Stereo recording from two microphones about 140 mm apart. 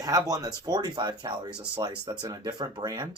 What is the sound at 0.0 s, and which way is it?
Speech, 25° right (ahead or behind).